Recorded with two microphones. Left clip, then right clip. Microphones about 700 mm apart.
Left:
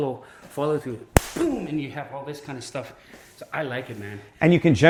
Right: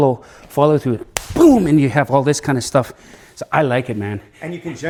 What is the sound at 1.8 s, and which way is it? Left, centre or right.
Speech, right.